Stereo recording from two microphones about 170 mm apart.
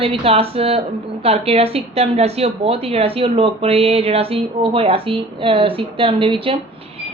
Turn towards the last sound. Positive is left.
turn(degrees=-30)  # may be behind; listen again after turning